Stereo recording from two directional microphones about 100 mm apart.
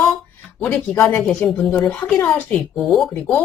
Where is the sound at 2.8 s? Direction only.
Centre (ahead or behind).